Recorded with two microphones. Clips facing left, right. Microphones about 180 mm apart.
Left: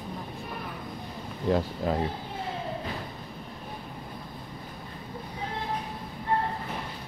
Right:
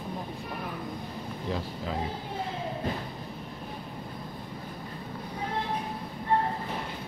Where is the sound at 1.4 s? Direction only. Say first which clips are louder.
Left 8 dB; 55° left (ahead or behind).